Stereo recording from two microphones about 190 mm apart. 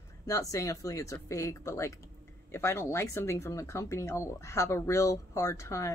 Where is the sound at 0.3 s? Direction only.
15° left (ahead or behind).